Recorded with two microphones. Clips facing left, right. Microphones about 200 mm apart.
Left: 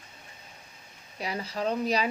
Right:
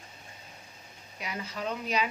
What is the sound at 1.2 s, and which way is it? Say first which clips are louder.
Speech: left 5 dB; 35° left (ahead or behind).